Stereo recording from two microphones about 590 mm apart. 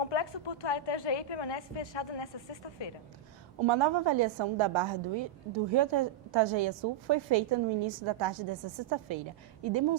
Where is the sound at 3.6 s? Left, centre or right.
Right.